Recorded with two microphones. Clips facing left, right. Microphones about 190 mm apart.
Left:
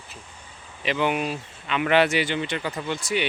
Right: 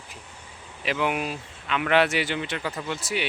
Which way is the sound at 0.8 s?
Centre (ahead or behind).